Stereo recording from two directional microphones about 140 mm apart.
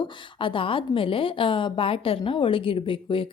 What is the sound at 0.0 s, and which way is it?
A woman's voice, 35° left (ahead or behind).